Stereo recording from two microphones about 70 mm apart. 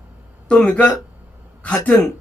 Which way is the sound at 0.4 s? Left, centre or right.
Centre.